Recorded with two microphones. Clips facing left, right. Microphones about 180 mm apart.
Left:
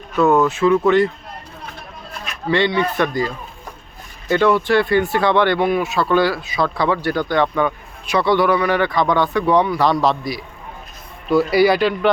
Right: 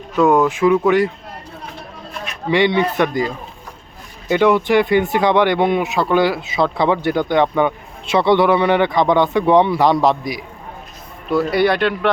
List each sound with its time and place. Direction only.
0.2 s speech: 10° right (ahead or behind)
2.5 s speech: 20° right (ahead or behind)
11.3 s speech: centre (ahead or behind)